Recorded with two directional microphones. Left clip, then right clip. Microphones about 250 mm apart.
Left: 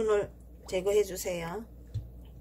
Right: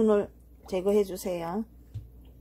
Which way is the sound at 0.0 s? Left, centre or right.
Right.